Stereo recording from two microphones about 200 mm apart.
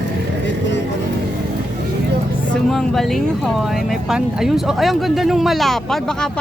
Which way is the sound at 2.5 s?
Centre (ahead or behind).